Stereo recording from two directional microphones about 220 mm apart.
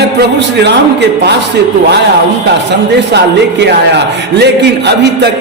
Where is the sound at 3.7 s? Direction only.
50° right (ahead or behind).